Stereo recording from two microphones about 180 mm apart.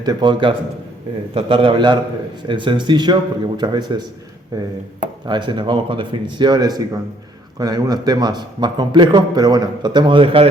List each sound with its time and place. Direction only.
0.0 s a man's voice: 25° right (ahead or behind)